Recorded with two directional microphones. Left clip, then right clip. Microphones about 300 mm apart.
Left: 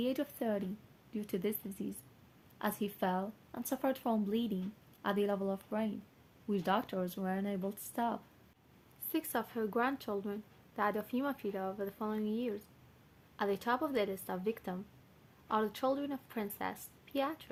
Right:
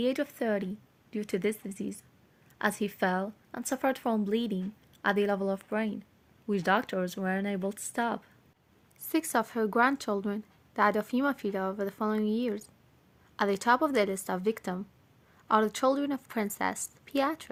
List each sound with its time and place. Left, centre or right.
0.0 s a woman's voice: right